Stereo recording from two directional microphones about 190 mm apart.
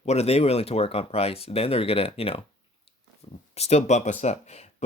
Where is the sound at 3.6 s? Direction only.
35° left (ahead or behind).